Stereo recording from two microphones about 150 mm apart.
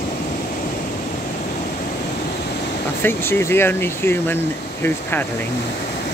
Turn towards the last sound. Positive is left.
turn(degrees=15)  # may be behind; listen again after turning